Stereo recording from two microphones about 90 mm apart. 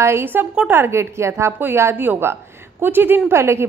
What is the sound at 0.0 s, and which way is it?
A woman's voice, 25° right (ahead or behind).